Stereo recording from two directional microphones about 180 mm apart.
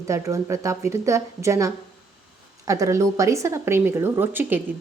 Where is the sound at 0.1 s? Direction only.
15° right (ahead or behind).